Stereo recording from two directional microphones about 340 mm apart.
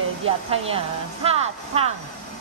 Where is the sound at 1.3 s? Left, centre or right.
Centre.